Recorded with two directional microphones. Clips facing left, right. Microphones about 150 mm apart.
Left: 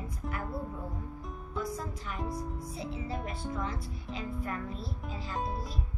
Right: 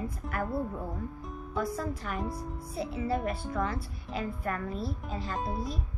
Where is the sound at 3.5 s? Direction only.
65° right (ahead or behind).